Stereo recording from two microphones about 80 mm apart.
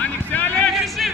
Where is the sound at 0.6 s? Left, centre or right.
Centre.